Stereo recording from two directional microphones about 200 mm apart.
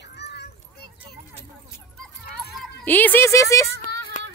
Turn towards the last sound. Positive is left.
turn(degrees=15)  # may be behind; listen again after turning